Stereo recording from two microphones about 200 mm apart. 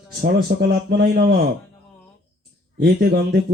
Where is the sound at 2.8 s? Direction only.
55° right (ahead or behind).